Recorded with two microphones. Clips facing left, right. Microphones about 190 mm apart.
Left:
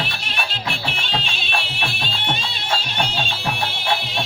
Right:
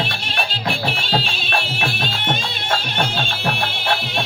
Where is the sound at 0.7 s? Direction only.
35° right (ahead or behind).